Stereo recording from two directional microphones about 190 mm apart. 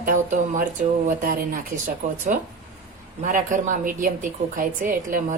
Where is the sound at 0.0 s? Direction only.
45° right (ahead or behind).